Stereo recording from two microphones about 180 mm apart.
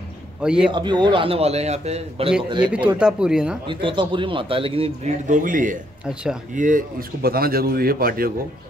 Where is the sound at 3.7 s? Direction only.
25° right (ahead or behind); by 5.8 s 45° right (ahead or behind).